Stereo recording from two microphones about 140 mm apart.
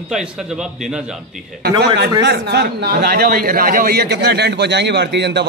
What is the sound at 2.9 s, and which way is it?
A man's voice, 90° right.